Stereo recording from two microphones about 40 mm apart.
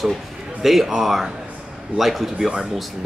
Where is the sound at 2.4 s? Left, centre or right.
Centre.